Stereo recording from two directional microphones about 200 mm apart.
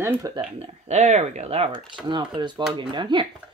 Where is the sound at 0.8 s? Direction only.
35° right (ahead or behind).